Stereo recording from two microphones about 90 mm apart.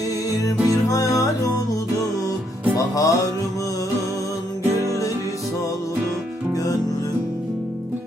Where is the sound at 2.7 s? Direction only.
40° left (ahead or behind).